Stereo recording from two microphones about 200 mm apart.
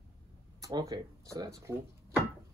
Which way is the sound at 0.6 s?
15° right (ahead or behind).